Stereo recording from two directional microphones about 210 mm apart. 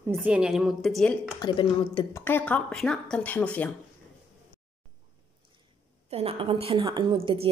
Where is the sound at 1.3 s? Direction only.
20° left (ahead or behind).